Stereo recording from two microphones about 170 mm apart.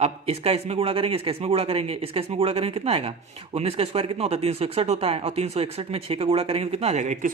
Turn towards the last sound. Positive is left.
turn(degrees=-50)  # may be behind; listen again after turning